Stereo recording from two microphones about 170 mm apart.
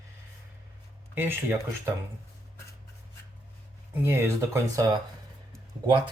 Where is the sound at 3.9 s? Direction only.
15° right (ahead or behind).